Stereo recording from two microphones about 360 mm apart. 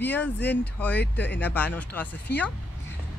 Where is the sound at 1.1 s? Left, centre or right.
Left.